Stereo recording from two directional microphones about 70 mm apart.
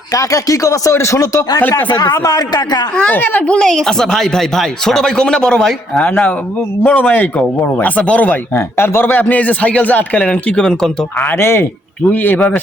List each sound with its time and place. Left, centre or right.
0.1 s speech: left
1.7 s speech: left
2.9 s speech: centre
6.0 s speech: left
8.8 s speech: left; by 11.3 s centre
11.3 s speech: left